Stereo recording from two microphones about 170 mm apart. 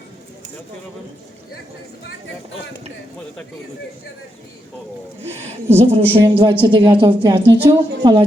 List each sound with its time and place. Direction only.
5.2 s a woman's voice: 40° right (ahead or behind)